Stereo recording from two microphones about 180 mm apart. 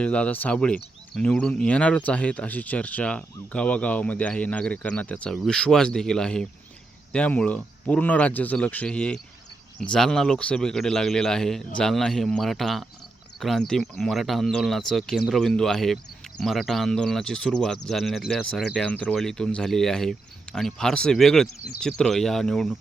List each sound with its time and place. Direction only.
0.0 s speech: 5° left (ahead or behind)